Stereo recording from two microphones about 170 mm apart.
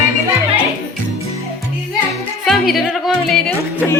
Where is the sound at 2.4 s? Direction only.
Centre (ahead or behind).